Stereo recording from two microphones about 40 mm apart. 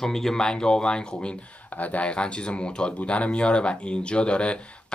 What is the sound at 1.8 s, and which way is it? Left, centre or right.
Speech, left.